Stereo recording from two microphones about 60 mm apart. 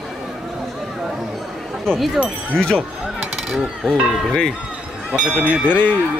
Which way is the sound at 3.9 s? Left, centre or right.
Centre.